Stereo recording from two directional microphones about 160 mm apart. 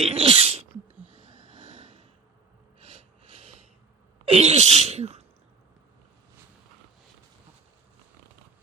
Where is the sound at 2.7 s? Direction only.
35° right (ahead or behind).